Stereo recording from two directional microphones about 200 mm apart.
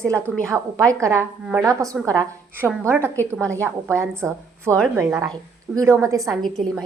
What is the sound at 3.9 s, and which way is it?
A woman's voice, 15° right (ahead or behind).